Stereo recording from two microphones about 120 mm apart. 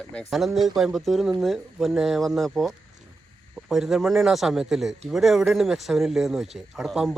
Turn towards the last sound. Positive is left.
turn(degrees=0)  # may be behind; listen again after turning